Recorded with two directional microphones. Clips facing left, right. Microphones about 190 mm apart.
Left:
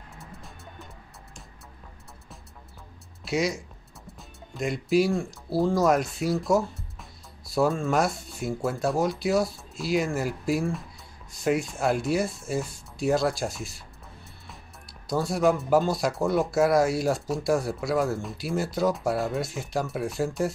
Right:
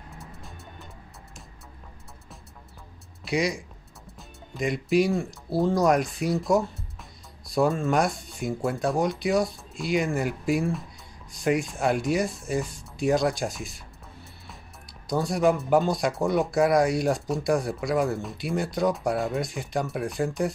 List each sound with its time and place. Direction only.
3.3 s speech: centre (ahead or behind)
15.0 s speech: centre (ahead or behind)